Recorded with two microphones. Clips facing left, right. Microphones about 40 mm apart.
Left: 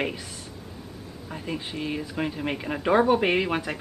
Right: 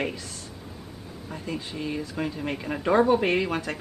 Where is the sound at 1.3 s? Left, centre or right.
Centre.